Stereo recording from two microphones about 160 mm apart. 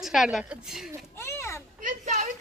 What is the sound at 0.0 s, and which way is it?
Speech, centre (ahead or behind).